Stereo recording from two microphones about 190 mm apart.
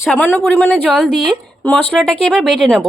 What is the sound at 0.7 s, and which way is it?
A woman's voice, 5° right (ahead or behind).